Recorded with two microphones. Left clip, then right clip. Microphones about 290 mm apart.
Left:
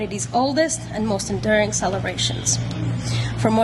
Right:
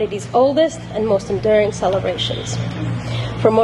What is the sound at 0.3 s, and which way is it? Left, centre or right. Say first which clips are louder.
A woman's voice: right 5 dB; left.